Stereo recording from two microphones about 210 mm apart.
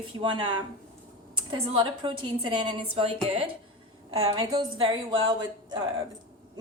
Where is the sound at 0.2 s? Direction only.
25° right (ahead or behind).